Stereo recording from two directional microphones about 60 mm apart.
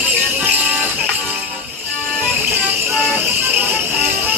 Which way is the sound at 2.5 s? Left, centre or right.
Right.